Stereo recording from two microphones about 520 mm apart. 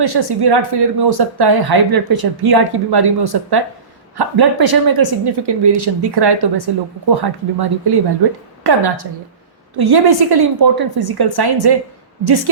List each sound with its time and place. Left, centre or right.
0.0 s speech: right